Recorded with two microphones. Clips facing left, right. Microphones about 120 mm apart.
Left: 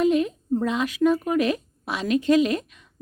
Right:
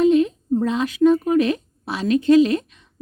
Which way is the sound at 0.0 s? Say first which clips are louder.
Right 5 dB; 30° right (ahead or behind).